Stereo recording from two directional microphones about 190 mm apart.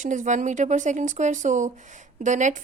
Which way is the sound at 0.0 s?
40° right (ahead or behind).